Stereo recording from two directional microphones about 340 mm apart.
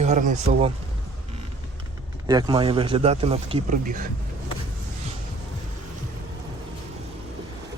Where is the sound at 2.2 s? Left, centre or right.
Centre.